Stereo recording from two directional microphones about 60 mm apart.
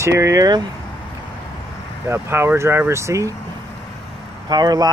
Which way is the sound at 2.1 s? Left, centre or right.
Right.